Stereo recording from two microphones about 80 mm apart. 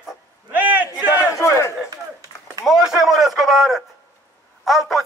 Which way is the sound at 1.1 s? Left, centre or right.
Left.